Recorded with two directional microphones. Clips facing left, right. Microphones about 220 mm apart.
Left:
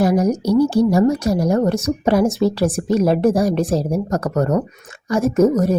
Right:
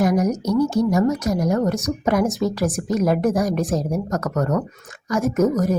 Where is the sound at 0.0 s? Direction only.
30° left (ahead or behind).